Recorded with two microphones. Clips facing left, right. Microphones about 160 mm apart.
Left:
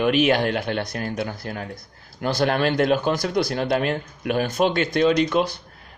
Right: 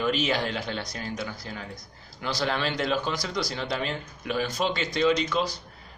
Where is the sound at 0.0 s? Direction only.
65° left (ahead or behind).